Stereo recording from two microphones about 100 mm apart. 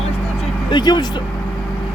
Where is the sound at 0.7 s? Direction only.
45° left (ahead or behind).